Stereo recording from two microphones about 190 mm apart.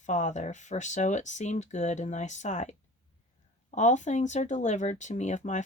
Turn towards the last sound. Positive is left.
turn(degrees=40)  # may be behind; listen again after turning